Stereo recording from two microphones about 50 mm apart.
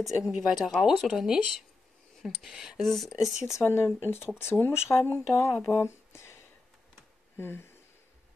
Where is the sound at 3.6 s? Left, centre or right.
Left.